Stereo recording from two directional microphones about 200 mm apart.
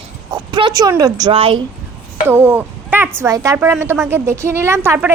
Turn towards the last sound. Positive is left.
turn(degrees=-10)  # may be behind; listen again after turning